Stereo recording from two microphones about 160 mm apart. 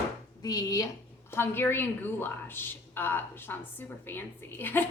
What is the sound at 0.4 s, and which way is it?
A woman's voice, 20° left (ahead or behind).